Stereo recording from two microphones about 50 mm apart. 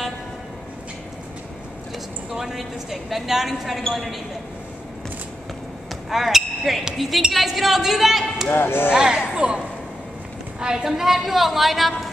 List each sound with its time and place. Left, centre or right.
2.3 s speech: centre
6.0 s basketball bounce: centre
7.0 s speech: centre
8.5 s speech: left
8.9 s a man's voice: centre